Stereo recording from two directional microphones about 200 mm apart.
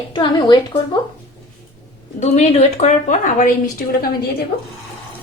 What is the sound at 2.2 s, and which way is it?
A woman's voice, 35° left (ahead or behind).